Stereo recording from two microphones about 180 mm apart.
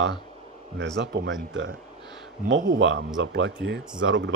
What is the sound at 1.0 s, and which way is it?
A man's voice, 70° right (ahead or behind).